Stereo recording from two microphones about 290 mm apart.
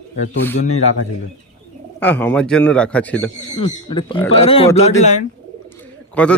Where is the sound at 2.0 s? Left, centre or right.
Centre.